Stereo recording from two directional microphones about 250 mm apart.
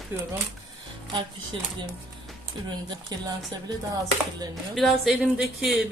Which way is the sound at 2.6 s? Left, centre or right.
Centre.